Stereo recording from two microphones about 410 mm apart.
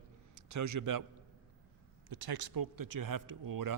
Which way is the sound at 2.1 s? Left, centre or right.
Right.